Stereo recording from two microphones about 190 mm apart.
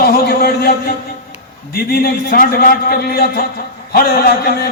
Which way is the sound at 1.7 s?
55° left (ahead or behind).